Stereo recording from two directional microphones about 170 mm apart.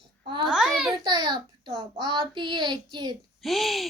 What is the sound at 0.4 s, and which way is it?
Babbling, 5° right (ahead or behind).